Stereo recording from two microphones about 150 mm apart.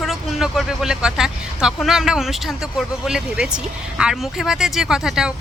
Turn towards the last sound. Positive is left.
turn(degrees=-5)  # may be behind; listen again after turning